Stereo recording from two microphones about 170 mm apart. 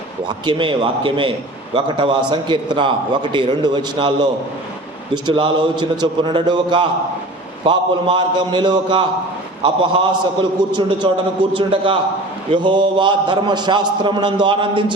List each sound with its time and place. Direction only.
0.4 s a man's voice: 30° right (ahead or behind)